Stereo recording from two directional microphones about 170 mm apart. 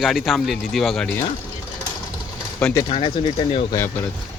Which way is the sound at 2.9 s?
35° left (ahead or behind).